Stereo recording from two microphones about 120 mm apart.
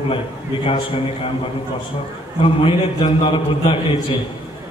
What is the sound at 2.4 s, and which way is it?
A man's voice, 45° left (ahead or behind).